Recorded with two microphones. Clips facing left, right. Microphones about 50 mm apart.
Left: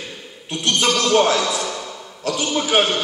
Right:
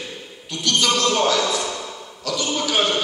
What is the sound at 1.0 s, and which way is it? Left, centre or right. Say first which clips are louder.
Speech: left 3 dB; left.